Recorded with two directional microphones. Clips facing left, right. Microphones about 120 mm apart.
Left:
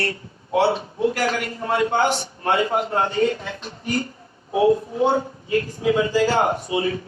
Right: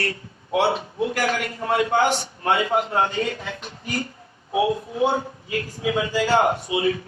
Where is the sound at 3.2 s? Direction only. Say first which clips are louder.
Left 6 dB; 30° left (ahead or behind).